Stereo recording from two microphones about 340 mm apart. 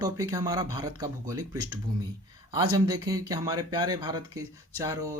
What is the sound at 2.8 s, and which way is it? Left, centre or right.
Speech, centre.